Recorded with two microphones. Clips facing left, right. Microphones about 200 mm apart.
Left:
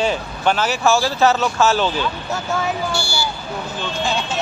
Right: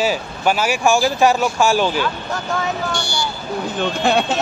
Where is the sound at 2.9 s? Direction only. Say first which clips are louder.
Even; 10° left (ahead or behind).